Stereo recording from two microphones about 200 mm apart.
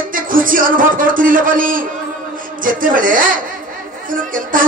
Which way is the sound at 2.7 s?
45° right (ahead or behind).